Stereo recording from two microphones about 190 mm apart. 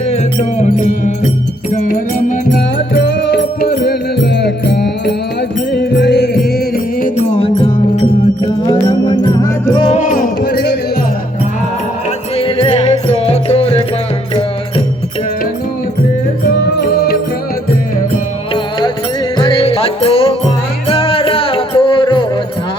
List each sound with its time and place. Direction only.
0.1 s music: 40° left (ahead or behind)
2.6 s music: 60° left (ahead or behind)
7.3 s music: 30° left (ahead or behind)
9.9 s music: 45° left (ahead or behind); by 10.8 s 60° left (ahead or behind)
12.4 s music: 30° left (ahead or behind)
16.8 s music: 55° left (ahead or behind)
19.4 s music: 30° left (ahead or behind)